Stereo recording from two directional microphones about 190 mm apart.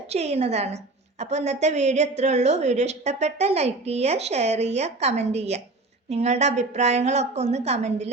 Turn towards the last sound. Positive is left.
turn(degrees=-35)  # may be behind; listen again after turning